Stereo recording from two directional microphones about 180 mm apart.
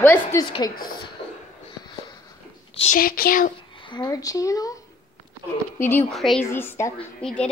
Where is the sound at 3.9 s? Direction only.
20° left (ahead or behind).